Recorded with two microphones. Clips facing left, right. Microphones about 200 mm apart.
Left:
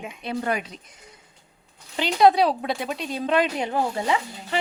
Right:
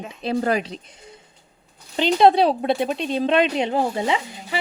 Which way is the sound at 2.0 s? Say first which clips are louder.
Right 2 dB; 25° right (ahead or behind).